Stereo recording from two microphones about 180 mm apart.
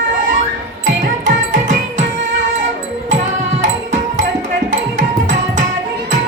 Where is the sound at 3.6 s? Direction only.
45° right (ahead or behind).